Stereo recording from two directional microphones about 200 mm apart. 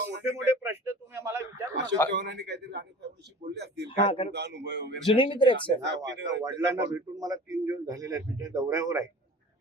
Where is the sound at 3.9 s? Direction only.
25° left (ahead or behind).